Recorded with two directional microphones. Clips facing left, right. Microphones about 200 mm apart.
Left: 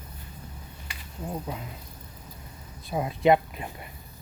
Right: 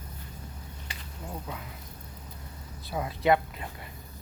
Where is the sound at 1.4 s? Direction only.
25° left (ahead or behind).